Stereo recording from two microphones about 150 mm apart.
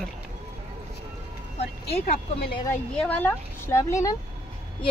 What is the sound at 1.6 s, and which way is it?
Vehicle, 45° left (ahead or behind).